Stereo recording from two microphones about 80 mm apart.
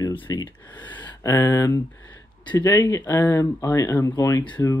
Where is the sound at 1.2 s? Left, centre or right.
Left.